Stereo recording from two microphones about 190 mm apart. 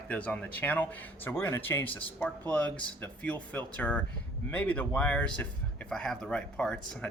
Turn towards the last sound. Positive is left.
turn(degrees=5)  # may be behind; listen again after turning